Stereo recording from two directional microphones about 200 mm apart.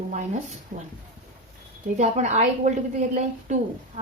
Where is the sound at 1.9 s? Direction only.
35° right (ahead or behind).